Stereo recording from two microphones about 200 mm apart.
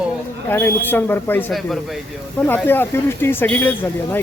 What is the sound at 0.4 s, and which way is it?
Speech, 10° left (ahead or behind).